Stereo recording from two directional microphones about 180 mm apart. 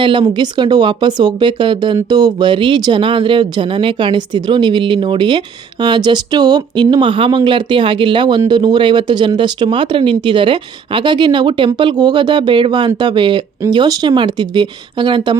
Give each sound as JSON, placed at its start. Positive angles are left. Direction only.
{"t": 0.0, "sound": "speech", "side_deg": -25}